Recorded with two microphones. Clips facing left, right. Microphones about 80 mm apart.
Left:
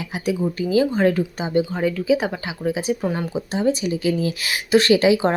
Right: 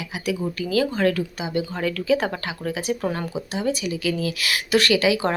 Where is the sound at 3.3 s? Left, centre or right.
Left.